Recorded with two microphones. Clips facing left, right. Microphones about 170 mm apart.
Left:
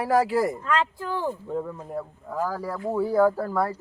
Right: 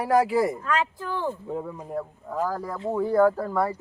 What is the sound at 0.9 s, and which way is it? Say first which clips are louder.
Speech: left 1 dB; 10° left (ahead or behind).